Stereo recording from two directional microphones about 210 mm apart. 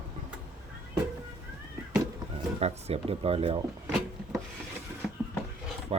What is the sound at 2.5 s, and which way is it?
Speech, 30° right (ahead or behind).